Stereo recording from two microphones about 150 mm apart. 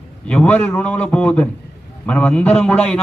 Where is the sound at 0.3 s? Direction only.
10° left (ahead or behind).